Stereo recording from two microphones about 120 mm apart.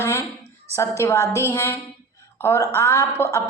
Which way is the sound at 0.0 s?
25° left (ahead or behind).